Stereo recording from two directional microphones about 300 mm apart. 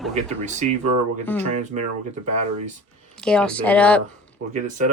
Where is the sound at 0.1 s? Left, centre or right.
Right.